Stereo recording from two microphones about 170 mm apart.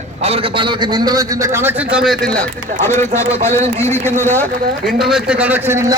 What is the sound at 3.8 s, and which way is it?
Speech, 15° left (ahead or behind).